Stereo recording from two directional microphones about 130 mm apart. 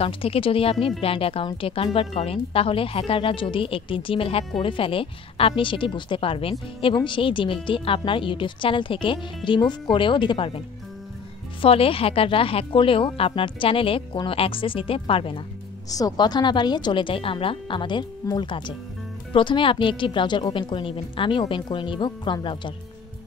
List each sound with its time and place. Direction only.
0.0 s speech: 45° left (ahead or behind)
11.6 s speech: 45° left (ahead or behind)
15.9 s speech: 30° left (ahead or behind)